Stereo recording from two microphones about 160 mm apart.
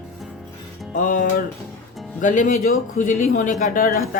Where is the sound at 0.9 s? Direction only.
55° left (ahead or behind).